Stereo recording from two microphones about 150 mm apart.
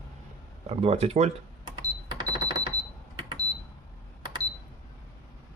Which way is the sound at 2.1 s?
25° right (ahead or behind).